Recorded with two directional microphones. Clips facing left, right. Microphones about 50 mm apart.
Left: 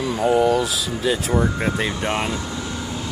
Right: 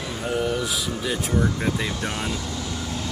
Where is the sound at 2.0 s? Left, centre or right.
Left.